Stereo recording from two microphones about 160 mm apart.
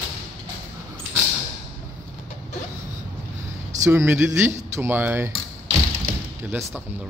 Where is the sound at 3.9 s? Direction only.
15° right (ahead or behind).